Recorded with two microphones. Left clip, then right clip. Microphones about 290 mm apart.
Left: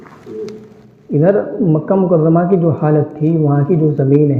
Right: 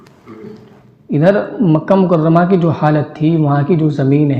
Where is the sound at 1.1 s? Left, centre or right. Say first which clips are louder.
Even; right.